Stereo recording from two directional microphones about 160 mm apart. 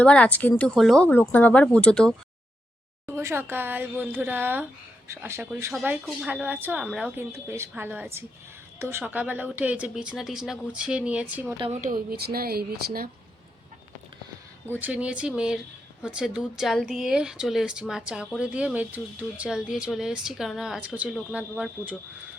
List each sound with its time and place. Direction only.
0.0 s speech: 5° left (ahead or behind)
3.1 s speech: 15° right (ahead or behind)
7.3 s speech: 15° right (ahead or behind)
11.8 s speech: 50° right (ahead or behind)
12.1 s speech: 70° right (ahead or behind)
14.7 s speech: 10° right (ahead or behind)